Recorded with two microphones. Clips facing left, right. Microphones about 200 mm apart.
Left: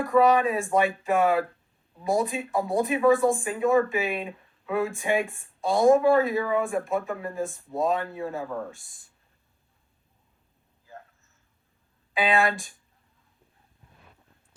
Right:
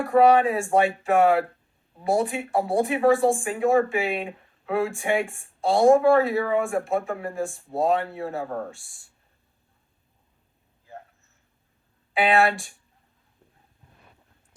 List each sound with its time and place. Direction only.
0.0 s speech: 30° right (ahead or behind)
8.4 s speech: 40° right (ahead or behind)
12.1 s speech: 30° right (ahead or behind)